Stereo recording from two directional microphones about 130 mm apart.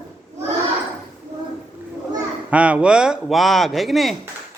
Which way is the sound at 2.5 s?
10° right (ahead or behind).